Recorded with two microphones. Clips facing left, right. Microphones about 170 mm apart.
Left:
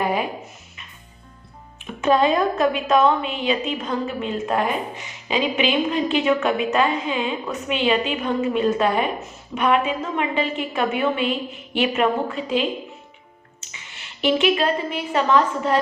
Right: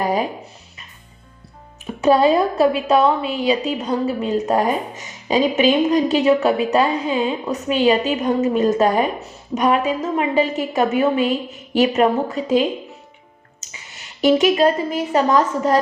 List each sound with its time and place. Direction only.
0.0 s music: 40° right (ahead or behind)
2.0 s a woman's voice: 35° right (ahead or behind)